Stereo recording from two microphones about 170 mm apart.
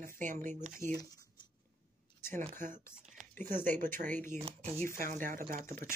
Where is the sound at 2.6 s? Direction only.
55° right (ahead or behind).